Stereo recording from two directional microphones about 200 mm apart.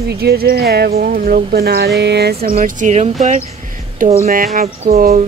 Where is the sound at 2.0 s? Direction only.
55° right (ahead or behind).